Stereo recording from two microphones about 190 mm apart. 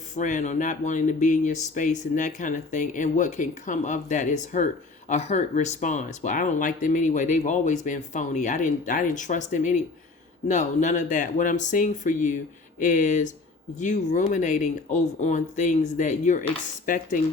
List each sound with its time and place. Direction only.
0.2 s speech: 40° left (ahead or behind)